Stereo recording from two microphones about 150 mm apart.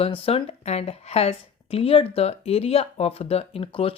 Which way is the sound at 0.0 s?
40° left (ahead or behind).